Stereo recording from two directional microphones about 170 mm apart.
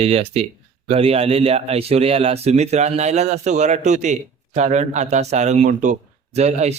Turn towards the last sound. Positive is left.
turn(degrees=-40)  # may be behind; listen again after turning